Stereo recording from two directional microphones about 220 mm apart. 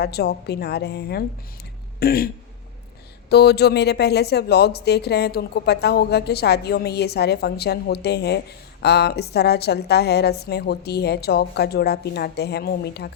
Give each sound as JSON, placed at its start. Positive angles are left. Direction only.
{"t": 0.0, "sound": "speech", "side_deg": 45}